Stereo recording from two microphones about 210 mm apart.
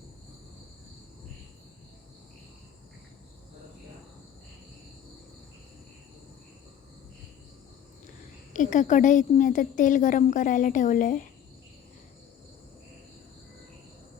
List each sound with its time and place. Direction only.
8.5 s a woman's voice: 40° left (ahead or behind)